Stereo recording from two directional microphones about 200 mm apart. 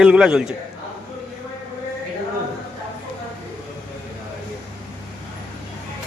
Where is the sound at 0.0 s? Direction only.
5° right (ahead or behind).